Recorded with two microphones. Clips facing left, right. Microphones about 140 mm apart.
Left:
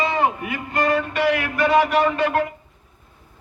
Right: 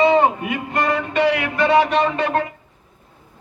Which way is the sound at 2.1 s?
20° right (ahead or behind).